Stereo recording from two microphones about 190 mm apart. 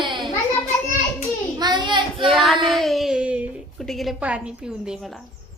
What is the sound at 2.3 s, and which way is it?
Speech, centre (ahead or behind).